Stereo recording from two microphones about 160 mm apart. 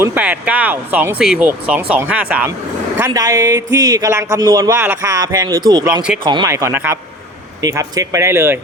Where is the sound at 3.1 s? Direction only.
20° right (ahead or behind).